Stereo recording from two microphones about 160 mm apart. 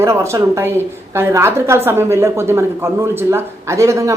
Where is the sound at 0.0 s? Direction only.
15° right (ahead or behind).